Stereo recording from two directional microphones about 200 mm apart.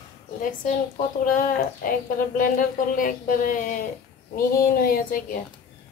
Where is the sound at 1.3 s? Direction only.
45° left (ahead or behind).